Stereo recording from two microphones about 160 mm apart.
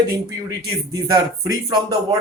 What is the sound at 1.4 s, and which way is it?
Speech, 25° right (ahead or behind).